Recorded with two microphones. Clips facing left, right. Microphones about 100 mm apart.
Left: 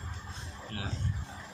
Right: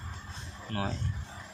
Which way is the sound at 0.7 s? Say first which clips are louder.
Right 7 dB; 40° right (ahead or behind).